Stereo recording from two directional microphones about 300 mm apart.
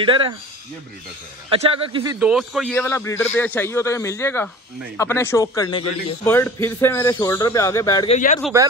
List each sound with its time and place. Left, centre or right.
0.0 s a man's voice: centre
1.5 s a man's voice: centre
2.1 s a man's voice: centre
8.5 s a man's voice: centre